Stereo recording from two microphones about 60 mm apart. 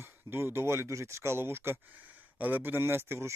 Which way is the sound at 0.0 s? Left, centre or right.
Right.